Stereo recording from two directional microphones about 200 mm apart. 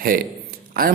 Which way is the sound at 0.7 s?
45° right (ahead or behind).